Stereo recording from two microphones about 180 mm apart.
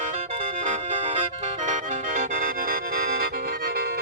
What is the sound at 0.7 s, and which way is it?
Music, 35° right (ahead or behind).